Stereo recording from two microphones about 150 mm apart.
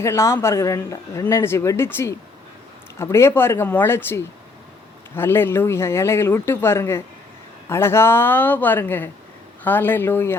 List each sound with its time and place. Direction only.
0.0 s speech: 20° left (ahead or behind)